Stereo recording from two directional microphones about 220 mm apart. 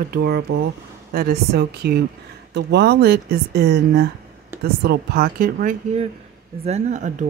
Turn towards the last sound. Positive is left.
turn(degrees=-35)  # may be behind; listen again after turning